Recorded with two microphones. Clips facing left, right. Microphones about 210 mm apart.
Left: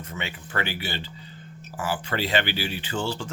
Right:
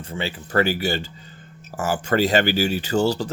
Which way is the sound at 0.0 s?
30° right (ahead or behind).